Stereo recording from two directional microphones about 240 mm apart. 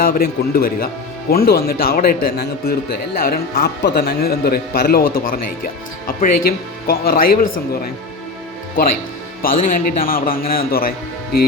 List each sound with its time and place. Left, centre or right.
0.0 s a man's voice: left
9.4 s a man's voice: left